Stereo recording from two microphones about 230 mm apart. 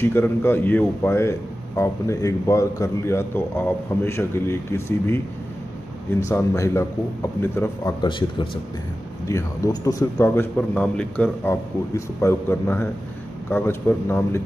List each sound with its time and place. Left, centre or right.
0.0 s a man's voice: centre